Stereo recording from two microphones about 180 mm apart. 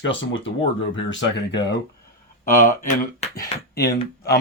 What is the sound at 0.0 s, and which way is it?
Speech, 90° left.